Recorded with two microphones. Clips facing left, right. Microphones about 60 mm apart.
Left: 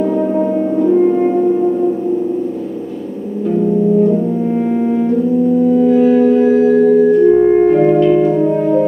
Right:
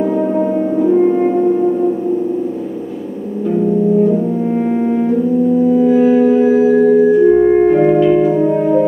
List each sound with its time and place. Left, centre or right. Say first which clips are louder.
0.0 s music: even; centre
5.7 s music: even; centre